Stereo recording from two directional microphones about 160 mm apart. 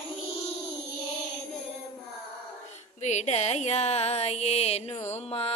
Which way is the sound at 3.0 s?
45° left (ahead or behind).